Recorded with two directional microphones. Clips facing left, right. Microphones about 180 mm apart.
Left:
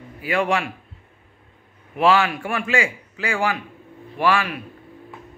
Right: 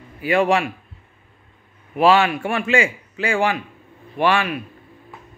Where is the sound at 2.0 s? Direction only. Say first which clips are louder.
Right 3 dB; 25° right (ahead or behind).